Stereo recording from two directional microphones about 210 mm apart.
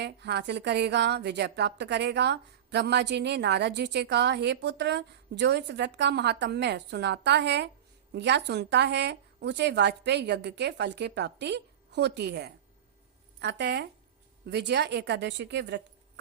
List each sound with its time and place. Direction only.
0.0 s a woman's voice: 55° right (ahead or behind)